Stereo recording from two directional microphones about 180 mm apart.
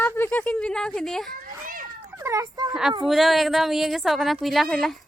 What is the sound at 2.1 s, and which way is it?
Speech, 15° right (ahead or behind).